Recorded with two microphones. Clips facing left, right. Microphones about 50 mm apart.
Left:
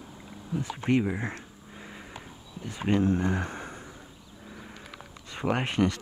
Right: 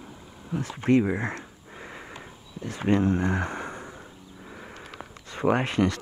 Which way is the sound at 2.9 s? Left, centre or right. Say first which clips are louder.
Right 2 dB; right.